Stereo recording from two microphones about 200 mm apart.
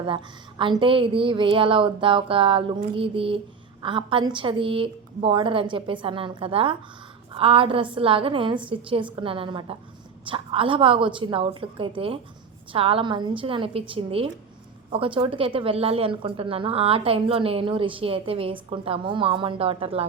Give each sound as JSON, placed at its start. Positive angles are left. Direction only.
{"t": 0.6, "sound": "a woman's voice", "side_deg": -25}